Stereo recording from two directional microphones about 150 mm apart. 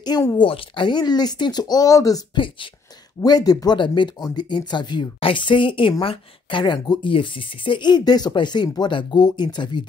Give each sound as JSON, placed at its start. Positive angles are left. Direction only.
{"t": 0.0, "sound": "speech", "side_deg": 25}